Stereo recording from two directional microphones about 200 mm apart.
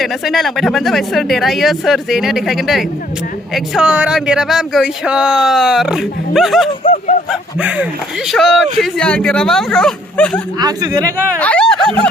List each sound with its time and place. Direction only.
0.0 s speech: centre (ahead or behind)
6.8 s a sound: 30° left (ahead or behind)
7.3 s speech: 5° right (ahead or behind)
10.6 s speech: 20° right (ahead or behind)
11.3 s speech: 5° left (ahead or behind)